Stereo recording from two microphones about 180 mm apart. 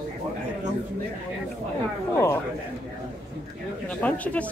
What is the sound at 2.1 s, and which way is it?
Speech, 15° left (ahead or behind).